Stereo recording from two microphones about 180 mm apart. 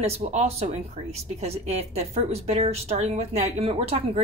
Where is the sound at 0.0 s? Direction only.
35° right (ahead or behind).